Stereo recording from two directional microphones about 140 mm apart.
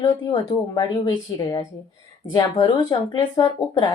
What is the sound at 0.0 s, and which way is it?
Speech, 25° left (ahead or behind).